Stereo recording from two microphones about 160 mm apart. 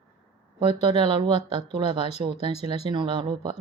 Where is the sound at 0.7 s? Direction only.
30° right (ahead or behind).